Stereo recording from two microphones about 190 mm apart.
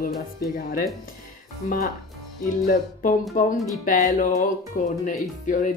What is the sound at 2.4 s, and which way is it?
Speech, 45° left (ahead or behind).